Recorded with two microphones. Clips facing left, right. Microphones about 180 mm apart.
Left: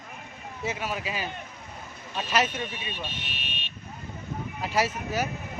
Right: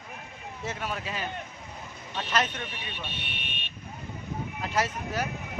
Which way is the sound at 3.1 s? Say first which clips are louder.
Left 1 dB; 60° right (ahead or behind).